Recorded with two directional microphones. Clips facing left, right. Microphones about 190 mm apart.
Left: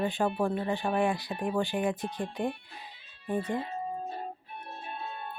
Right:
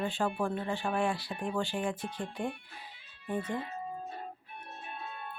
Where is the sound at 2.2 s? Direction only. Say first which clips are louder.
Left 4 dB; 35° left (ahead or behind).